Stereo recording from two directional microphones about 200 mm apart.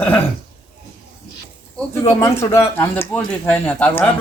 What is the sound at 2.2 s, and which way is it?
A man's voice, 15° left (ahead or behind).